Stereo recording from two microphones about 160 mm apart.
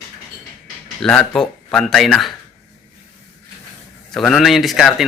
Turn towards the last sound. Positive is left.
turn(degrees=0)  # may be behind; listen again after turning